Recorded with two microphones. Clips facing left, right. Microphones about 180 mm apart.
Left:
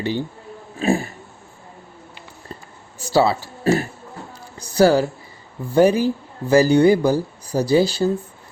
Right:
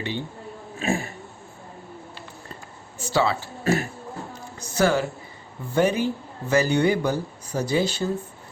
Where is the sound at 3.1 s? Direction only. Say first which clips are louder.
Left 5 dB; 35° left (ahead or behind).